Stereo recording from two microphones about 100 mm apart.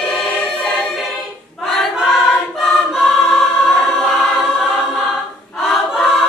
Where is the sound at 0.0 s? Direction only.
5° left (ahead or behind).